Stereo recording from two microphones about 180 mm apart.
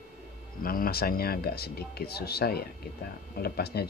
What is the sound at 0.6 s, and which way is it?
Speech, 55° left (ahead or behind).